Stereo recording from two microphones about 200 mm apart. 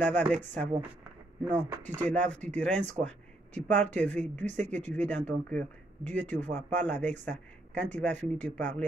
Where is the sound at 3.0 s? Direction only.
5° left (ahead or behind).